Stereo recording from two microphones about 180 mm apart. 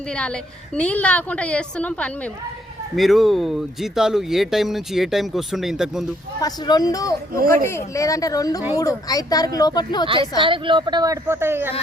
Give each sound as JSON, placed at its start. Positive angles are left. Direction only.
{"t": 0.1, "sound": "a woman's voice", "side_deg": 5}
{"t": 6.4, "sound": "speech", "side_deg": 20}
{"t": 10.1, "sound": "speech", "side_deg": -30}